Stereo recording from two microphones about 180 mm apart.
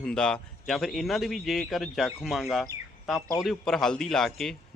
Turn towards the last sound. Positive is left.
turn(degrees=0)  # may be behind; listen again after turning